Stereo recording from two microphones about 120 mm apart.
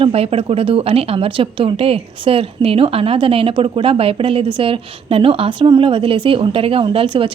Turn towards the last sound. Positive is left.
turn(degrees=-45)  # may be behind; listen again after turning